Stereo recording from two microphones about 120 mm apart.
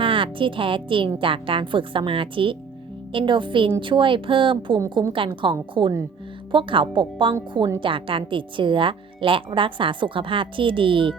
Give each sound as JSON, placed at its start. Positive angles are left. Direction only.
{"t": 0.0, "sound": "speech", "side_deg": -45}